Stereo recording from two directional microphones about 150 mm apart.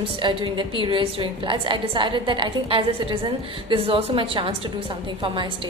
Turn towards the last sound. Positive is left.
turn(degrees=-35)  # may be behind; listen again after turning